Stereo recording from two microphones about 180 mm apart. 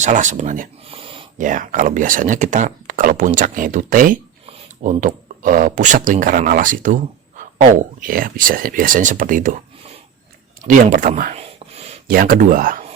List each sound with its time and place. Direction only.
0.0 s speech: 45° right (ahead or behind)
0.9 s a sound: 30° right (ahead or behind)
1.4 s speech: 45° right (ahead or behind)
10.7 s speech: 45° right (ahead or behind)
11.3 s whispering: 35° right (ahead or behind)
12.0 s speech: 55° right (ahead or behind)